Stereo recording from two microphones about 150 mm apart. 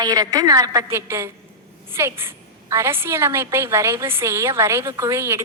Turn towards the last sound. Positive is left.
turn(degrees=-15)  # may be behind; listen again after turning